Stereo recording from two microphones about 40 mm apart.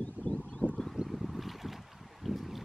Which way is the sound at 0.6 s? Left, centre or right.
Right.